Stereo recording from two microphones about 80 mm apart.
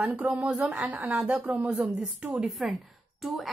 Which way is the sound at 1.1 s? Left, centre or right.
Centre.